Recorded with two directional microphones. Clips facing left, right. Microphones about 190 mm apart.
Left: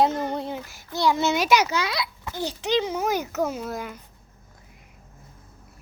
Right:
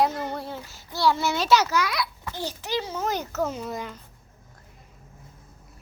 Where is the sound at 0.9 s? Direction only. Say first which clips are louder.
Left 2 dB; 20° left (ahead or behind).